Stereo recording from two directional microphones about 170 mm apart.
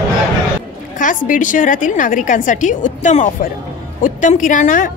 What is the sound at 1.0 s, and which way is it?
A woman's voice, 50° left (ahead or behind).